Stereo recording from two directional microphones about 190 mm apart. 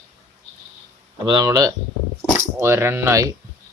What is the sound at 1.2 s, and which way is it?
Speech, 20° right (ahead or behind).